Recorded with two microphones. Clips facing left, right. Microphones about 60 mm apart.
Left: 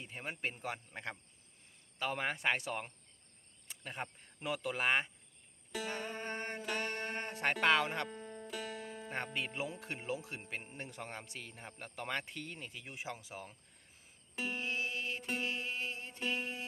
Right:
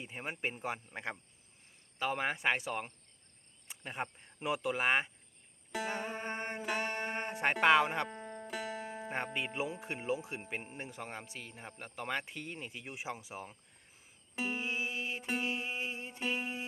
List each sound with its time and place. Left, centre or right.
0.0 s speech: centre
3.7 s speech: centre
8.1 s music: right
8.5 s speech: centre
14.3 s music: centre